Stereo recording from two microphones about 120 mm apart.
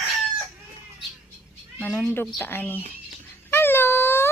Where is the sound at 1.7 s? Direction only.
15° left (ahead or behind).